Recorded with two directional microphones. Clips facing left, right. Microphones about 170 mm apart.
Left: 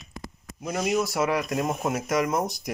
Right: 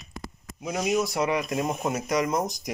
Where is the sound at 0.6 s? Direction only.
Centre (ahead or behind).